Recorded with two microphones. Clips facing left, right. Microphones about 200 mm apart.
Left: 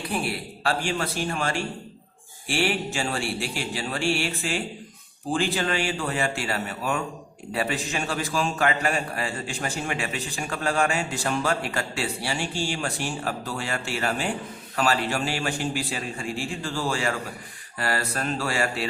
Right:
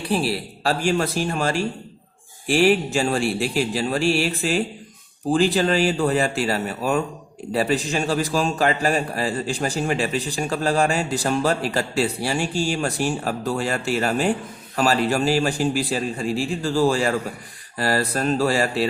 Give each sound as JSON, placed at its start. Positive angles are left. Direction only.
{"t": 0.1, "sound": "a man's voice", "side_deg": -30}